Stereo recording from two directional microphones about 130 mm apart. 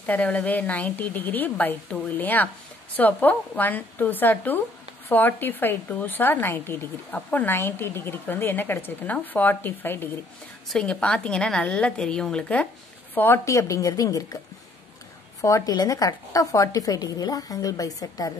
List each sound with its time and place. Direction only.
0.0 s a woman's voice: 10° left (ahead or behind); by 14.4 s 25° left (ahead or behind)
15.4 s a woman's voice: 25° left (ahead or behind)